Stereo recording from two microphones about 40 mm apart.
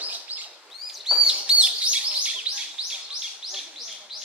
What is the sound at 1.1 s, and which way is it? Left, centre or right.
Chirp, right.